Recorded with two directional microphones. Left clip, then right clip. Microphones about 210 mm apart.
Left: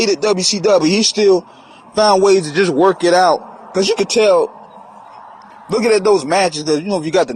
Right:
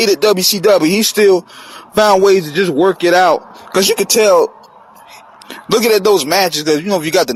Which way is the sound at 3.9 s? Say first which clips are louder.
Even; 40° right (ahead or behind).